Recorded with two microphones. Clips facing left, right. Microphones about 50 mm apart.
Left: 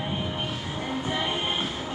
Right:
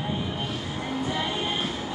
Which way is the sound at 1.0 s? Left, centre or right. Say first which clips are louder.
Even; left.